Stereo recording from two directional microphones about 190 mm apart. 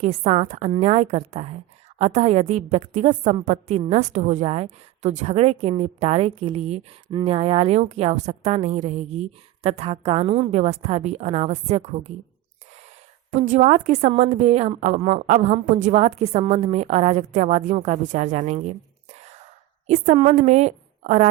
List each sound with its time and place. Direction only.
0.0 s a woman's voice: 35° right (ahead or behind)
13.3 s a woman's voice: 40° right (ahead or behind)
19.9 s a woman's voice: 40° right (ahead or behind)